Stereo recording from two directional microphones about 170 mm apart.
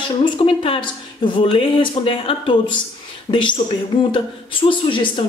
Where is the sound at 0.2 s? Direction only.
30° left (ahead or behind).